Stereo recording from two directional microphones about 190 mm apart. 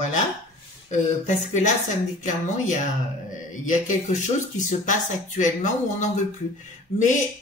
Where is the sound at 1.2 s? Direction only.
40° left (ahead or behind).